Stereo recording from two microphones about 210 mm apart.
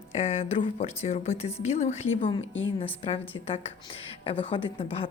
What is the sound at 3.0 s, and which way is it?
Speech, 25° left (ahead or behind).